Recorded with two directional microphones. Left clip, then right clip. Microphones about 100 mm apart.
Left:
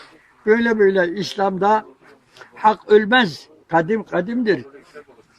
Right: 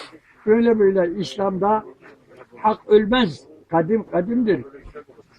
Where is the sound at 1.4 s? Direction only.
20° left (ahead or behind).